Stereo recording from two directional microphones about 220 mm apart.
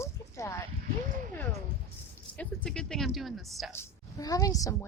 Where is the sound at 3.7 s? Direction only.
15° left (ahead or behind).